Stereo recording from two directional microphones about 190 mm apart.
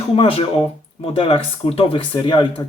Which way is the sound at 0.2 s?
30° left (ahead or behind).